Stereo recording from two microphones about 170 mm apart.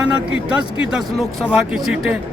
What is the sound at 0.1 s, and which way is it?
A man's voice, 5° right (ahead or behind).